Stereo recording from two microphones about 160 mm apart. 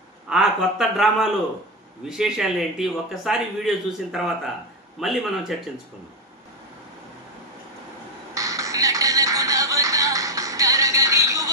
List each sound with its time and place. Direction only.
0.3 s a man's voice: 5° right (ahead or behind)
8.4 s music: 20° right (ahead or behind)